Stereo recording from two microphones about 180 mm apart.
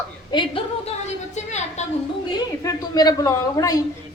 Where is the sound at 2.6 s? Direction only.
20° left (ahead or behind).